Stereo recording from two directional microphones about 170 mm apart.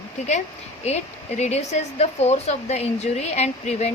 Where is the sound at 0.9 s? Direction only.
40° left (ahead or behind).